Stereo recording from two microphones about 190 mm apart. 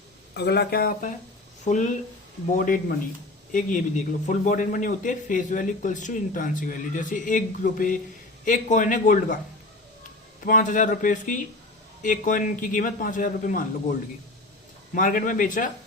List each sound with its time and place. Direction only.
0.3 s speech: 60° left (ahead or behind)
1.6 s a man's voice: 40° left (ahead or behind)
10.4 s a man's voice: 45° left (ahead or behind)
14.9 s a man's voice: 45° left (ahead or behind)